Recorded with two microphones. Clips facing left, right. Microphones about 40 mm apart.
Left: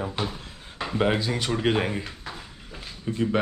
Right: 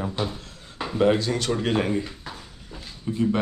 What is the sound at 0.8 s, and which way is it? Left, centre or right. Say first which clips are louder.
Speech: right 3 dB; centre.